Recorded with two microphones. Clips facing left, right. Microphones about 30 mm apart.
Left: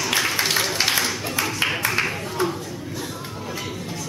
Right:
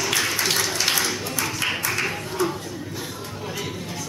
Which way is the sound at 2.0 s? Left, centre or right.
Centre.